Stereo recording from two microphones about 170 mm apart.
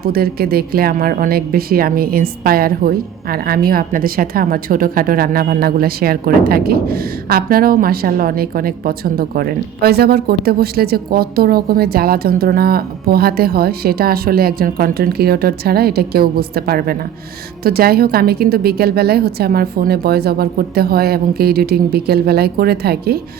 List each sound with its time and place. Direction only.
0.0 s speech: 65° right (ahead or behind)